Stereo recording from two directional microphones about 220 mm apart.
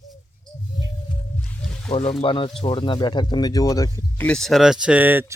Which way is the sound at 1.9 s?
25° left (ahead or behind).